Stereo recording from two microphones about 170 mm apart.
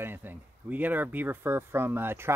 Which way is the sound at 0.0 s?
10° right (ahead or behind).